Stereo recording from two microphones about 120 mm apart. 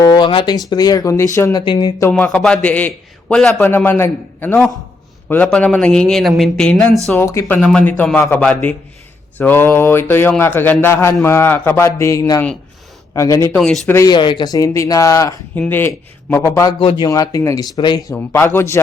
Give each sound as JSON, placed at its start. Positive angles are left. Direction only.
{"t": 0.2, "sound": "speech", "side_deg": 45}
{"t": 0.5, "sound": "speech", "side_deg": 35}
{"t": 1.5, "sound": "speech", "side_deg": 40}
{"t": 2.0, "sound": "a man's voice", "side_deg": 15}
{"t": 7.1, "sound": "speech", "side_deg": 20}
{"t": 7.6, "sound": "a man's voice", "side_deg": 5}
{"t": 13.6, "sound": "a man's voice", "side_deg": 0}
{"t": 13.8, "sound": "speech", "side_deg": 20}
{"t": 14.1, "sound": "speech", "side_deg": 40}
{"t": 15.5, "sound": "a man's voice", "side_deg": 15}
{"t": 18.1, "sound": "speech", "side_deg": 20}